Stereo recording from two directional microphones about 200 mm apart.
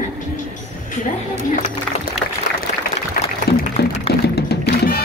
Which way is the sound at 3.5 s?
50° left (ahead or behind).